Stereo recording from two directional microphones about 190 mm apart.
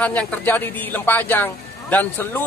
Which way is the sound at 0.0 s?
10° left (ahead or behind).